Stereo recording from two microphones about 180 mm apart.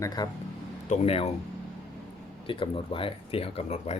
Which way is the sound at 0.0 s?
20° left (ahead or behind).